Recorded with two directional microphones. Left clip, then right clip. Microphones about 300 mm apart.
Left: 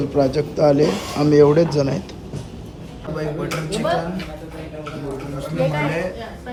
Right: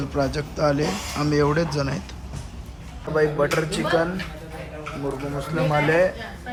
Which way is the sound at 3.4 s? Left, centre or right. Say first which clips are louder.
Left 1 dB; centre.